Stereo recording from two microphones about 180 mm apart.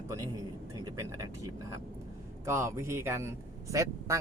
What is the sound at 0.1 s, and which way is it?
Speech, 15° right (ahead or behind).